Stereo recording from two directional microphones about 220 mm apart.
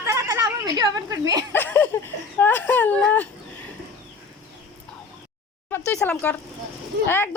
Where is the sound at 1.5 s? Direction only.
10° left (ahead or behind).